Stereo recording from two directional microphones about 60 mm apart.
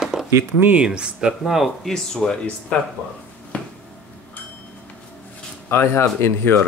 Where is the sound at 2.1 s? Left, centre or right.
Centre.